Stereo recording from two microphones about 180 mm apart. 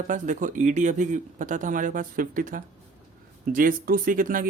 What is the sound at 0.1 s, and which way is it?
Speech, 45° right (ahead or behind).